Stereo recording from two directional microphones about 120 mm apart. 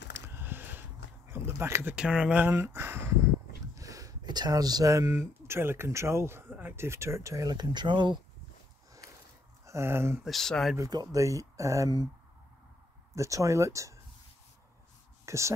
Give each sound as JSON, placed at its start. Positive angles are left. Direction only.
{"t": 0.3, "sound": "a sound", "side_deg": -15}
{"t": 2.0, "sound": "speech", "side_deg": -5}
{"t": 2.5, "sound": "speech", "side_deg": -20}
{"t": 9.7, "sound": "speech", "side_deg": -20}
{"t": 10.2, "sound": "speech", "side_deg": 5}
{"t": 10.8, "sound": "speech", "side_deg": -30}
{"t": 13.1, "sound": "speech", "side_deg": -25}
{"t": 15.2, "sound": "speech", "side_deg": -25}